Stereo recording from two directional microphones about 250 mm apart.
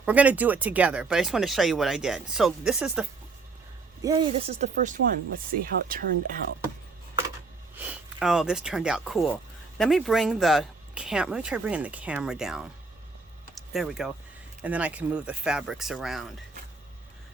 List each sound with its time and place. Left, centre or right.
0.0 s speech: centre
4.0 s speech: centre; by 6.4 s right
7.8 s speech: centre